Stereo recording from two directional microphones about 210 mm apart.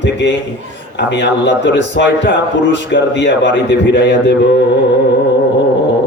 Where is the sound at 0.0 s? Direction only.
55° left (ahead or behind).